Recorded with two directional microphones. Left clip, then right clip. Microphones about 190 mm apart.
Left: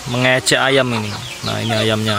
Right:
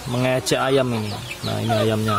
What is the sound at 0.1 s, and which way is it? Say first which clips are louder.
Speech: left 6 dB; centre (ahead or behind).